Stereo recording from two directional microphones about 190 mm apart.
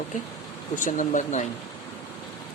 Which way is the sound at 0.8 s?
45° left (ahead or behind).